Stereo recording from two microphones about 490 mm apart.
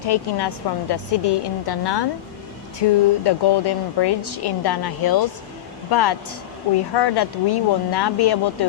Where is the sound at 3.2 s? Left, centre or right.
Left.